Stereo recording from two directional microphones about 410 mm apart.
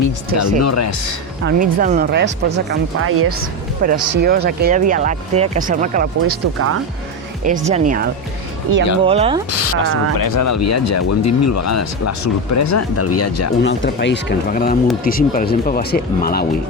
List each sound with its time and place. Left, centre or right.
0.6 s speech: left
1.5 s speech: centre
6.3 s speech: right
7.4 s speech: centre
8.7 s speech: right
9.0 s speech: centre
9.5 s speech: left
9.9 s speech: left
13.6 s speech: left